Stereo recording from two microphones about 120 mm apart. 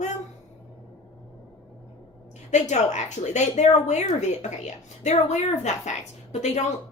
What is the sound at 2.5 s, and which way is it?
Speech, 75° left (ahead or behind).